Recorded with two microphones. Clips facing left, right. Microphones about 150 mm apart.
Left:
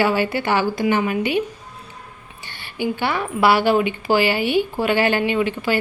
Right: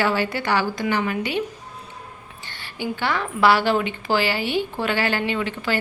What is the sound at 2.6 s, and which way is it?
A woman's voice, 15° left (ahead or behind).